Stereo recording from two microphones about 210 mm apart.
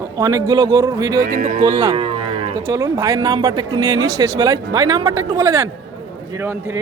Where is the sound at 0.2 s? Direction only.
15° right (ahead or behind).